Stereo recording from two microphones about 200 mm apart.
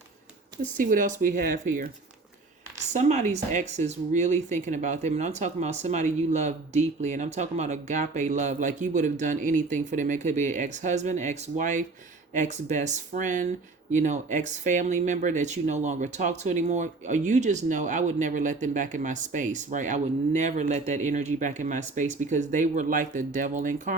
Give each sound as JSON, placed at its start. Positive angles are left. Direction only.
{"t": 0.6, "sound": "speech", "side_deg": -45}
{"t": 2.9, "sound": "speech", "side_deg": -35}